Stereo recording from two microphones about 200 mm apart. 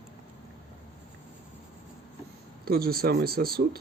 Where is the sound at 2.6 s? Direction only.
50° right (ahead or behind).